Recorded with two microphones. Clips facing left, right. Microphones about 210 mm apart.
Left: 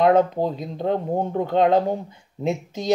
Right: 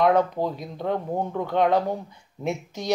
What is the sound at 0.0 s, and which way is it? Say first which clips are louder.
Speech: left 3 dB; 25° left (ahead or behind).